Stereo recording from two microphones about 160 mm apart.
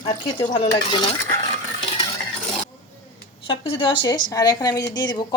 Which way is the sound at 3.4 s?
35° left (ahead or behind).